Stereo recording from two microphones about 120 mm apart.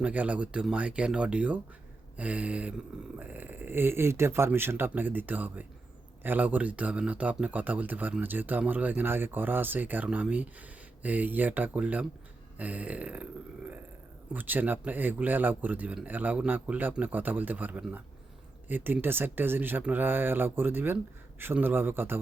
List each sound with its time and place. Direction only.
0.0 s speech: 10° right (ahead or behind)
14.3 s speech: 15° right (ahead or behind)